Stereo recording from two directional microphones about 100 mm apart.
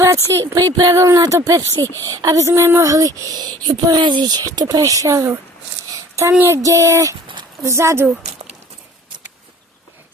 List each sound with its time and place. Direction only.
0.0 s a sound: 30° right (ahead or behind)
0.5 s speech: 40° right (ahead or behind)
6.4 s speech: 30° right (ahead or behind)